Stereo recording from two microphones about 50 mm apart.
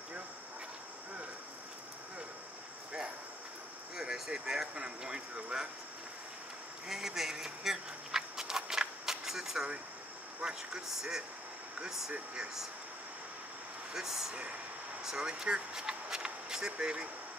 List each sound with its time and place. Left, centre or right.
3.9 s speech: centre
6.9 s a sound: centre
10.4 s speech: centre
13.9 s speech: centre